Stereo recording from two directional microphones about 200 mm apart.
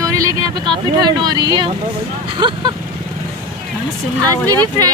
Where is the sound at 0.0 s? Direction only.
15° right (ahead or behind).